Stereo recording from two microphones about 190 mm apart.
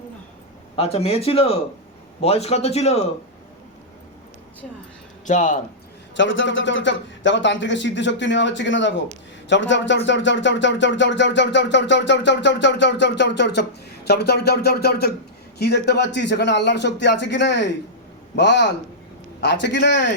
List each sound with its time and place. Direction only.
0.8 s speech: 35° left (ahead or behind)
5.2 s speech: 40° left (ahead or behind)
6.1 s a sound: 80° left; by 15.1 s 55° left (ahead or behind)
15.5 s speech: 60° left (ahead or behind)